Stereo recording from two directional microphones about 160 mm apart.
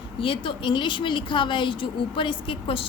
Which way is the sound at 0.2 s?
35° left (ahead or behind).